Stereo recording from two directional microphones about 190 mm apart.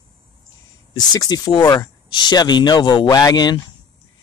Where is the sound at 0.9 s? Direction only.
20° left (ahead or behind).